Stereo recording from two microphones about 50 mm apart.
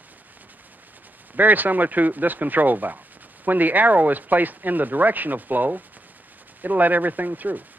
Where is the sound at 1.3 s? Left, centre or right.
Right.